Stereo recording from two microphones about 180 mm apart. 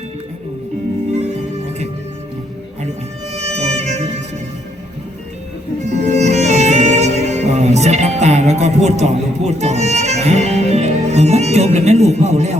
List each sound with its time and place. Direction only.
3.3 s music: 35° right (ahead or behind)
5.8 s music: 40° right (ahead or behind)